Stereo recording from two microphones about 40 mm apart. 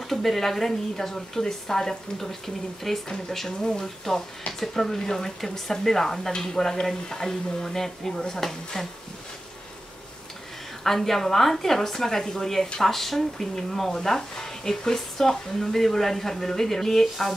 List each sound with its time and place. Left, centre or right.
0.0 s speech: centre
10.8 s speech: centre